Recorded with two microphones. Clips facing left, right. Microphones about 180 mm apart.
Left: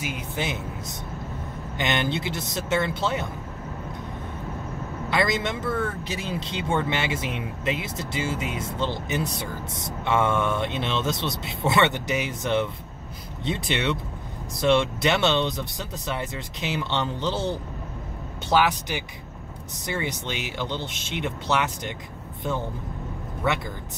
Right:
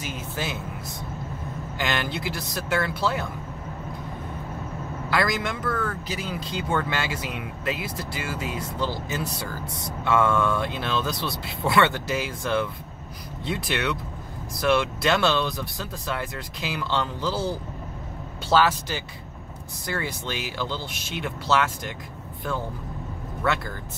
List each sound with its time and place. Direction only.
0.0 s speech: 15° left (ahead or behind)
5.1 s speech: 25° left (ahead or behind)
23.4 s speech: 20° left (ahead or behind)